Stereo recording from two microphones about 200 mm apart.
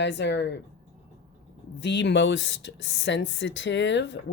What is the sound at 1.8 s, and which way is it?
Speech, 65° left (ahead or behind).